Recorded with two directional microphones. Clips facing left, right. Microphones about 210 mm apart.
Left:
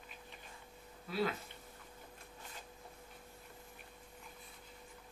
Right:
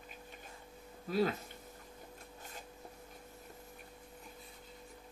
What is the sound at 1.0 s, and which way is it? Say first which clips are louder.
Speech: right 4 dB; 45° right (ahead or behind).